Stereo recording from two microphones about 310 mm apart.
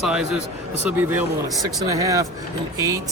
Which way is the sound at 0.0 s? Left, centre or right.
Centre.